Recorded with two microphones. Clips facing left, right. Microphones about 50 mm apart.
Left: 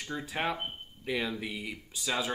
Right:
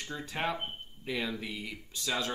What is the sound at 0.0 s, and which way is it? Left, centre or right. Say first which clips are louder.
Speech: left 1 dB; centre.